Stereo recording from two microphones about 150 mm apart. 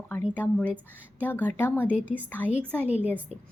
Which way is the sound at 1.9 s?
10° right (ahead or behind).